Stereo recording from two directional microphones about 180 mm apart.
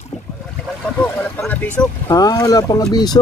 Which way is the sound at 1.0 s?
10° left (ahead or behind).